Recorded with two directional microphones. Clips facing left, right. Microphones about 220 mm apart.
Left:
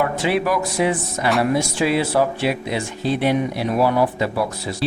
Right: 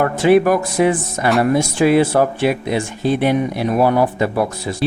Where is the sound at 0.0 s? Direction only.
50° right (ahead or behind).